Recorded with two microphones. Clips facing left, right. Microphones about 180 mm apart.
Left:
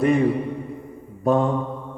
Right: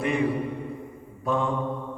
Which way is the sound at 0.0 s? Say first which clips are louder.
Left 6 dB; 40° left (ahead or behind).